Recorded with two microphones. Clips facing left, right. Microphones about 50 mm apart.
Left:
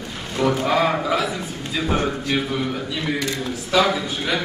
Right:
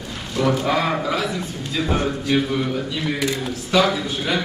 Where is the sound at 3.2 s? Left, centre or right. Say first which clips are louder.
Right 2 dB; centre.